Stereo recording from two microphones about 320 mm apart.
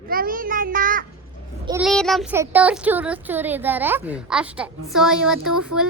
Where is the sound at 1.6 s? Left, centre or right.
Centre.